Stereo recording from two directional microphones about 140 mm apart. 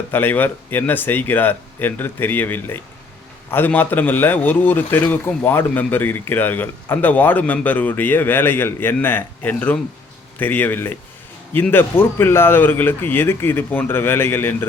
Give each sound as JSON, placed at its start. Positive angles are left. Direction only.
{"t": 0.1, "sound": "a man's voice", "side_deg": 15}